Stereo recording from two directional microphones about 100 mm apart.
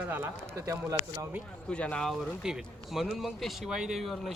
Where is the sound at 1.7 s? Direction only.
10° left (ahead or behind).